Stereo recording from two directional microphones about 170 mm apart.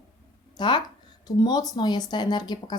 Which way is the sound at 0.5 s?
25° left (ahead or behind).